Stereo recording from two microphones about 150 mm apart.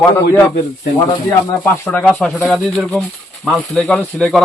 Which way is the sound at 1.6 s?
10° left (ahead or behind).